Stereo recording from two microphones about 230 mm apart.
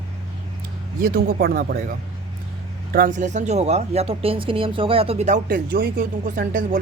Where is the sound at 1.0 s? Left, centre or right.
Right.